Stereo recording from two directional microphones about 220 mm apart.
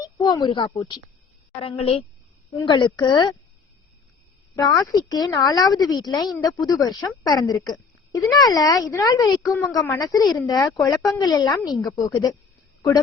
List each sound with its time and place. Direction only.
0.0 s speech: 15° left (ahead or behind)
4.5 s speech: 15° left (ahead or behind)